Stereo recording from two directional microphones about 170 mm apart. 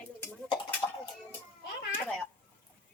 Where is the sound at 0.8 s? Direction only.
15° left (ahead or behind).